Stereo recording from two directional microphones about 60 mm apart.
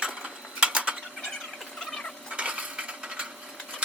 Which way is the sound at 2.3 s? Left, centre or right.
Right.